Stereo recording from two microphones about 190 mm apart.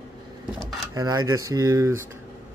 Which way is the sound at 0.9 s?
20° right (ahead or behind).